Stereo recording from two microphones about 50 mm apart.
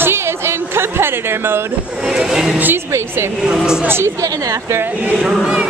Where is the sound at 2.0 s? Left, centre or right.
Centre.